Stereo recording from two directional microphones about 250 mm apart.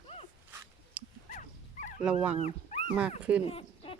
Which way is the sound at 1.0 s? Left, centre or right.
Centre.